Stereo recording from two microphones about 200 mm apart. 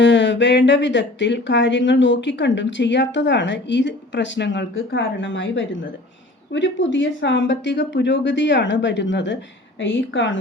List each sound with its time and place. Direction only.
0.0 s speech: 65° left (ahead or behind)